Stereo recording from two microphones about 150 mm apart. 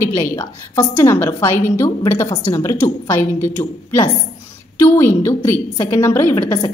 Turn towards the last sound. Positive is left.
turn(degrees=15)  # may be behind; listen again after turning